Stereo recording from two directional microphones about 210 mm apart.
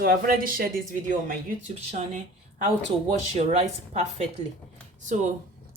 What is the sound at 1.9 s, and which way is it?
Speech, 35° right (ahead or behind).